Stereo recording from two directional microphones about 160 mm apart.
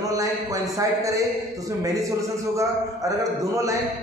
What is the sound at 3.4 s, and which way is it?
Speech, 20° right (ahead or behind).